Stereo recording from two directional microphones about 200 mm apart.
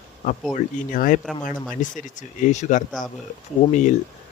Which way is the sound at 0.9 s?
45° left (ahead or behind).